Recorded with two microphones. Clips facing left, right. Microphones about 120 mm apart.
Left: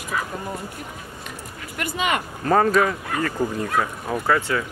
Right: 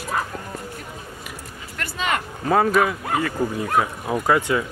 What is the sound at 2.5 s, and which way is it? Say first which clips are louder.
Speech: even; 5° right (ahead or behind).